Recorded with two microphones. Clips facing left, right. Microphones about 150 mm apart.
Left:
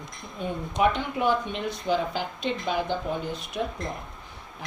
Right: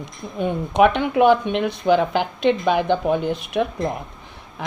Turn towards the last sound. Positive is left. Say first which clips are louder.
# right 9 dB
turn(degrees=-70)  # may be behind; listen again after turning